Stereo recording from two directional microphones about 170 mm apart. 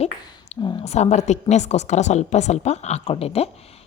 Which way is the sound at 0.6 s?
25° left (ahead or behind).